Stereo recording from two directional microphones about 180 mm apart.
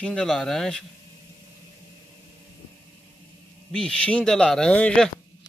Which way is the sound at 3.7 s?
5° left (ahead or behind).